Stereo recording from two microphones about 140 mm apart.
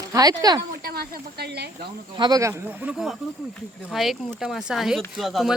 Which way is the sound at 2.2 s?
25° right (ahead or behind).